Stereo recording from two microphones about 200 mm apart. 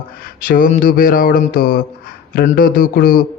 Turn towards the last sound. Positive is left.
turn(degrees=45)  # may be behind; listen again after turning